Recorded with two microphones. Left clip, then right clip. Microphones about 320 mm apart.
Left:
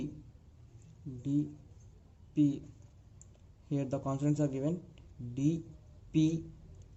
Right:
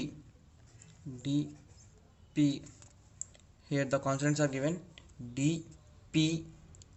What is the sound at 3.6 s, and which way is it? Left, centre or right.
Speech, right.